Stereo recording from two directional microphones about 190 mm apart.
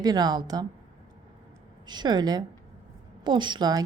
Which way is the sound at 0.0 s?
20° right (ahead or behind).